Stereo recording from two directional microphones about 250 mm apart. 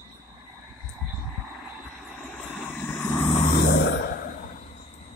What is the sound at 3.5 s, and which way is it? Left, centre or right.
Grunt, left.